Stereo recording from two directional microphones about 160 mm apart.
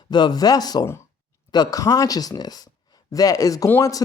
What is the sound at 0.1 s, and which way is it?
Speech, 25° left (ahead or behind).